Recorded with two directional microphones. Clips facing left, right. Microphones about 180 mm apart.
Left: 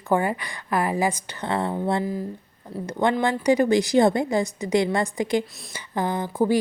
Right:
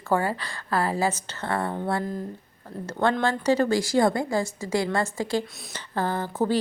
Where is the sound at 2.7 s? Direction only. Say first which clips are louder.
Left 3 dB; 5° left (ahead or behind).